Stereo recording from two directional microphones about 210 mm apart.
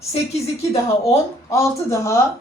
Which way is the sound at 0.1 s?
30° left (ahead or behind).